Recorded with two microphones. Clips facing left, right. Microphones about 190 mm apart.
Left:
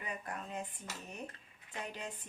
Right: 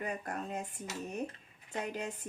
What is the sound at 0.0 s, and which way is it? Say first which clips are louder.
Speech: right 5 dB; 45° right (ahead or behind).